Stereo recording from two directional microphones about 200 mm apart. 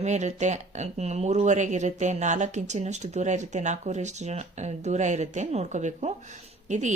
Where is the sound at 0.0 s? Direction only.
35° right (ahead or behind).